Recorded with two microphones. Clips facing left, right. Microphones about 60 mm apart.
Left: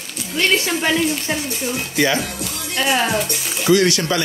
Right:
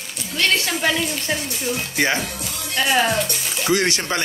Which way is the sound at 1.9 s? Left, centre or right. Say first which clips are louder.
Left 3 dB; right.